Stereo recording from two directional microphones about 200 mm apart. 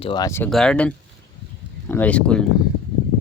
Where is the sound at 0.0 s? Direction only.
20° left (ahead or behind); by 2.4 s 5° left (ahead or behind).